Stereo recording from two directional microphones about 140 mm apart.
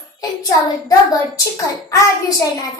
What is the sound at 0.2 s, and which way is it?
A child's voice, 25° left (ahead or behind).